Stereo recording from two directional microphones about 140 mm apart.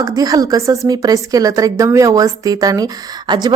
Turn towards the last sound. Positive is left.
turn(degrees=-30)  # may be behind; listen again after turning